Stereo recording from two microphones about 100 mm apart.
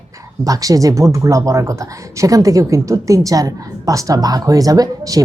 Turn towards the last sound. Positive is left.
turn(degrees=-35)  # may be behind; listen again after turning